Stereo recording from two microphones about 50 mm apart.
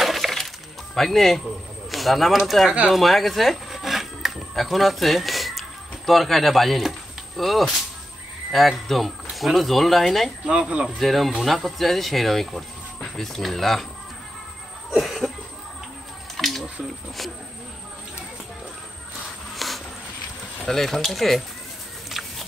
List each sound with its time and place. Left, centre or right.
0.0 s breaking: centre
0.9 s speech: centre
2.9 s a sound: centre
7.3 s speech: centre
10.4 s speech: centre
11.0 s speech: centre
14.9 s cough: centre
16.3 s a sound: centre
19.5 s a sound: centre
20.6 s speech: centre
22.1 s music: centre